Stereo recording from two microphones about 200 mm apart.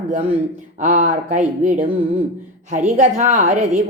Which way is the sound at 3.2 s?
40° right (ahead or behind).